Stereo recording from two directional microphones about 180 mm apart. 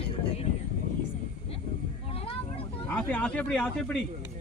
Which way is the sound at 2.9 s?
10° left (ahead or behind).